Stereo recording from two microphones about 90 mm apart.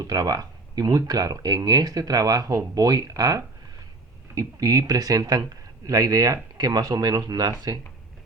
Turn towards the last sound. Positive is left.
turn(degrees=-45)  # may be behind; listen again after turning